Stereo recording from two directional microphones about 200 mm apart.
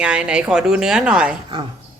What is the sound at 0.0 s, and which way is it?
A woman's voice, 5° right (ahead or behind).